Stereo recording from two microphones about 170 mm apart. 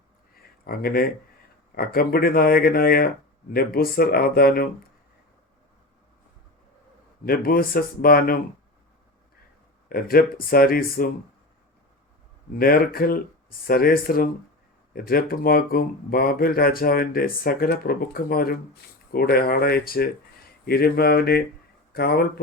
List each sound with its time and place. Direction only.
0.3 s a sound: 60° left (ahead or behind)
1.7 s speech: 60° left (ahead or behind)
7.3 s speech: 60° left (ahead or behind)
9.9 s speech: 60° left (ahead or behind)
12.5 s speech: 60° left (ahead or behind)